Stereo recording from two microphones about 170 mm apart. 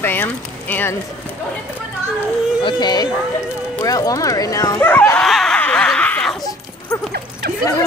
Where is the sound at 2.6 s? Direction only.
25° left (ahead or behind); by 6.4 s 5° left (ahead or behind).